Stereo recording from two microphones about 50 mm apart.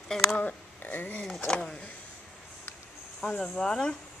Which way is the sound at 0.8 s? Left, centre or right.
Left.